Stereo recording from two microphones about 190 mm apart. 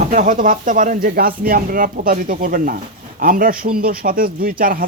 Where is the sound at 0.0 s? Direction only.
40° right (ahead or behind).